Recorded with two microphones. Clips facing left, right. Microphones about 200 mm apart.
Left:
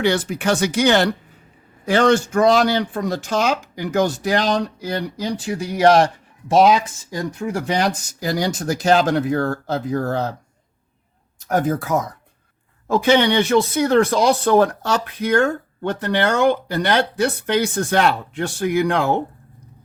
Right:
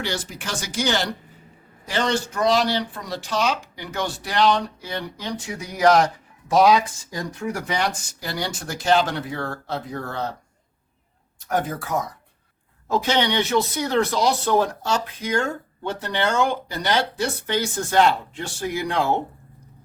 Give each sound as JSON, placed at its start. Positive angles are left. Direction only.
{"t": 0.0, "sound": "speech", "side_deg": 60}
{"t": 11.4, "sound": "speech", "side_deg": 45}
{"t": 13.0, "sound": "speech", "side_deg": 55}